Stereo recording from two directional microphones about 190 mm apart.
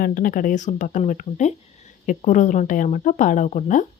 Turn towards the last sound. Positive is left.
turn(degrees=40)  # may be behind; listen again after turning